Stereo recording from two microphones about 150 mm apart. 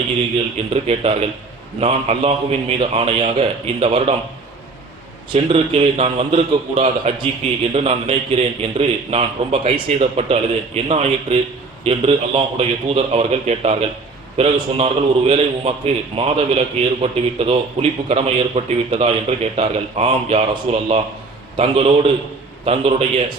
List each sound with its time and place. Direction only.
0.7 s a man's voice: 45° right (ahead or behind)
5.3 s a man's voice: 40° right (ahead or behind)